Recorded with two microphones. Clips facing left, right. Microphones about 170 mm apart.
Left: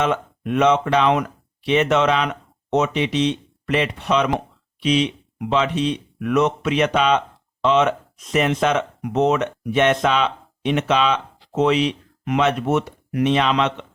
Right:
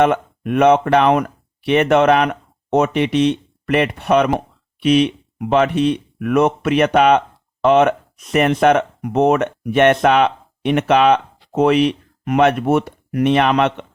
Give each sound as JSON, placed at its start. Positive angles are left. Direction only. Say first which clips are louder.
{"t": 0.0, "sound": "speech", "louder": "right 6 dB", "side_deg": -55}